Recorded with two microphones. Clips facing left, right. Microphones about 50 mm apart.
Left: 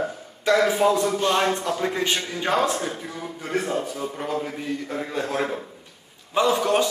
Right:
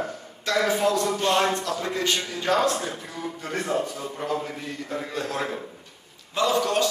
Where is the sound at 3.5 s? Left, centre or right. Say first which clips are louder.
Left 2 dB; centre.